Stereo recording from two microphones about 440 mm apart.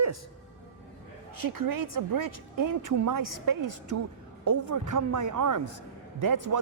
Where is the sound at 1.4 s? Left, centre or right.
Right.